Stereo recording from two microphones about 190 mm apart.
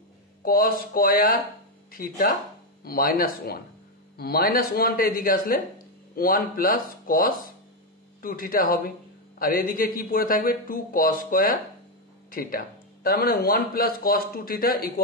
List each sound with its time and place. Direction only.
0.4 s a man's voice: 50° left (ahead or behind)